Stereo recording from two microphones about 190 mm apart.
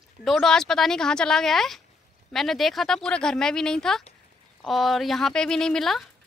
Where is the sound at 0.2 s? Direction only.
Centre (ahead or behind).